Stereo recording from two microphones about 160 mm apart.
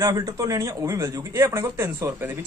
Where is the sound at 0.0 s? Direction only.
20° right (ahead or behind).